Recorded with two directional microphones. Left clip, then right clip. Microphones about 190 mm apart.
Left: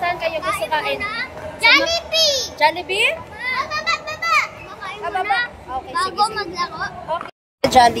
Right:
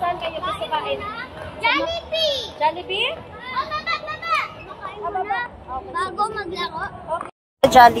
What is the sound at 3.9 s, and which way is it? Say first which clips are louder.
Children playing: left 4 dB; 5° left (ahead or behind).